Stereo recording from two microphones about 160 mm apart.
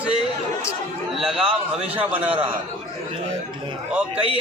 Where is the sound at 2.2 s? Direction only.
35° right (ahead or behind).